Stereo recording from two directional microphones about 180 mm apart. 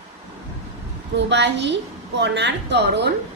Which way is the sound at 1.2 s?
80° right.